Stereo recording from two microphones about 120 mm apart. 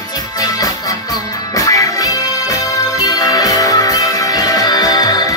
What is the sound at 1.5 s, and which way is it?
Music, 30° left (ahead or behind).